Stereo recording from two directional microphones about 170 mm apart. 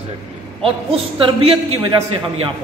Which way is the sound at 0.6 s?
30° right (ahead or behind).